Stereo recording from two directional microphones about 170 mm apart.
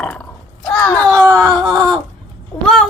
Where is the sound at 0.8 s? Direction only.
5° left (ahead or behind).